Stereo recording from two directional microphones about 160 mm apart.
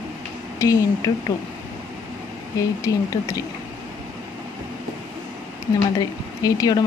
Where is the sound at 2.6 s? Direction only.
20° left (ahead or behind).